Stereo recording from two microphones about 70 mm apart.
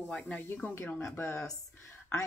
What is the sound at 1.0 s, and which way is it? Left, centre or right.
Speech, left.